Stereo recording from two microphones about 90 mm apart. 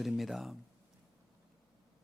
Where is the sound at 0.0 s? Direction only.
Centre (ahead or behind).